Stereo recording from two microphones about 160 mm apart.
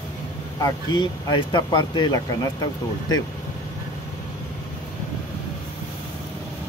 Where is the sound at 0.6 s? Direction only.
25° left (ahead or behind).